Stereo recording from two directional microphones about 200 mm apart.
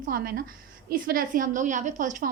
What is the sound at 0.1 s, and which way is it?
A woman's voice, 45° right (ahead or behind).